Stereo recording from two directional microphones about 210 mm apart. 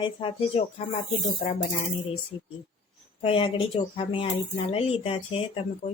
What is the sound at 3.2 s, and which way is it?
Speech, 25° left (ahead or behind).